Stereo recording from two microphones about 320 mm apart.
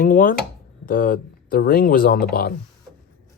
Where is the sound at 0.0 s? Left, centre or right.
Left.